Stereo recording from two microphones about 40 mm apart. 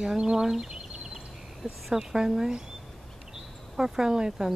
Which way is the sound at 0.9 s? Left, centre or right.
Centre.